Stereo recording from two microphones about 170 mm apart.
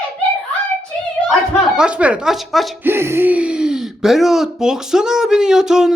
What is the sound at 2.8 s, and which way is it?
Speech, 15° right (ahead or behind).